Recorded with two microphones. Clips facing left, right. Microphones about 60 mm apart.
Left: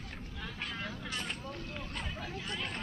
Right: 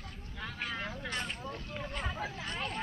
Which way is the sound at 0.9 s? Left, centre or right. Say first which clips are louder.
Right 2 dB; right.